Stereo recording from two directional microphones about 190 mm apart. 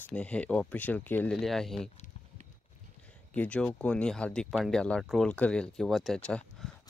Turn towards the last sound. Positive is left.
turn(degrees=5)  # may be behind; listen again after turning